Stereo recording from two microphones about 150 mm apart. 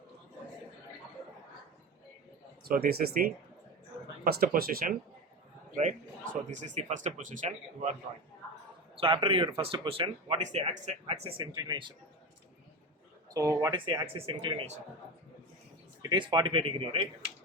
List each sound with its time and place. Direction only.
2.6 s speech: 80° right
6.5 s speech: 55° right (ahead or behind)
9.0 s speech: 35° right (ahead or behind)
10.4 s speech: 50° right (ahead or behind); by 11.9 s 30° right (ahead or behind)
13.3 s speech: 20° right (ahead or behind)
13.7 s speech: 35° right (ahead or behind)
16.0 s speech: 30° right (ahead or behind)